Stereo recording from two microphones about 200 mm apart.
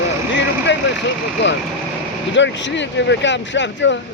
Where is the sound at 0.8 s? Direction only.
65° left (ahead or behind).